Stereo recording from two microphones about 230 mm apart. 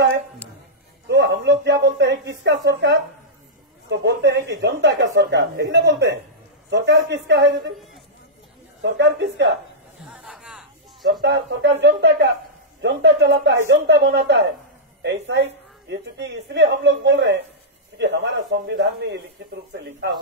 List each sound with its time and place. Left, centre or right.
1.0 s a sound: right
3.9 s a woman's voice: right
8.9 s a woman's voice: right
10.1 s music: centre
11.1 s a woman's voice: right